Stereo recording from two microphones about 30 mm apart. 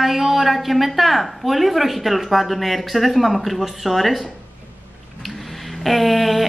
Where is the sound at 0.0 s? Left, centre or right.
Centre.